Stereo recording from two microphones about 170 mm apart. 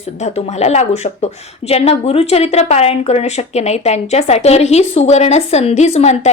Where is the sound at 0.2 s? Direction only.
40° left (ahead or behind).